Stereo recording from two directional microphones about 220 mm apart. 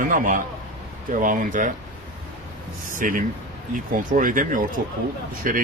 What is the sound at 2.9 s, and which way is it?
Speech, 35° right (ahead or behind).